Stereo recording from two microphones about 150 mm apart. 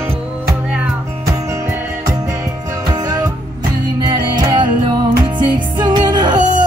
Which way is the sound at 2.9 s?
25° right (ahead or behind).